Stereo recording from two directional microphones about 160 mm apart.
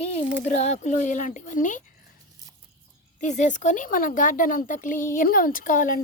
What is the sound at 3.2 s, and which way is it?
Speech, 50° left (ahead or behind).